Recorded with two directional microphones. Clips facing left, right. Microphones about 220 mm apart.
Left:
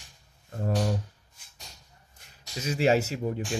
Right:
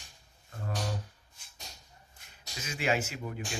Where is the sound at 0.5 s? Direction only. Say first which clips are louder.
Left 9 dB; 35° left (ahead or behind).